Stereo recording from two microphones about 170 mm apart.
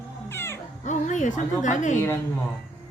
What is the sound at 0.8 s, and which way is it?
A woman's voice, 45° left (ahead or behind).